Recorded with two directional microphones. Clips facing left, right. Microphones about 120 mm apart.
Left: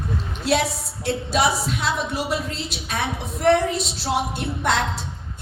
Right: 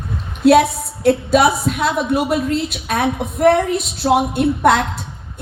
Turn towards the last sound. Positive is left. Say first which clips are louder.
# right 9 dB
turn(degrees=-55)  # may be behind; listen again after turning